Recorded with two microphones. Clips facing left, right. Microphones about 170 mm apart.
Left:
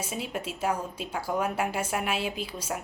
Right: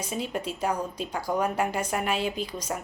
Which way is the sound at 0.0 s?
5° left (ahead or behind).